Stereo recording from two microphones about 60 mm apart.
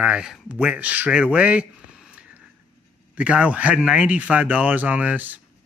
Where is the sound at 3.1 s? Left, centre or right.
Right.